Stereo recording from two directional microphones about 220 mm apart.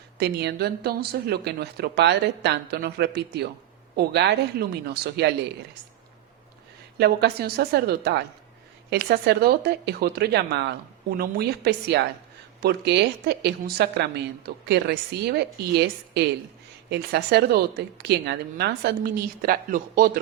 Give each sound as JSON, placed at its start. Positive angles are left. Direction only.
{"t": 0.2, "sound": "a woman's voice", "side_deg": -50}
{"t": 7.0, "sound": "a woman's voice", "side_deg": -45}